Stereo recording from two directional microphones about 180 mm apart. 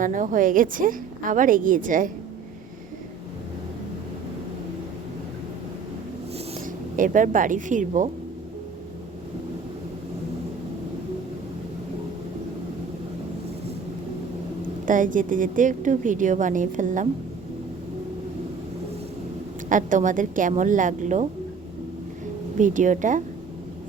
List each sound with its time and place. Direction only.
0.0 s a woman's voice: 45° right (ahead or behind)
6.9 s a woman's voice: 45° right (ahead or behind)
14.8 s a woman's voice: 45° right (ahead or behind)
19.6 s a woman's voice: 45° right (ahead or behind)
22.5 s a woman's voice: 45° right (ahead or behind)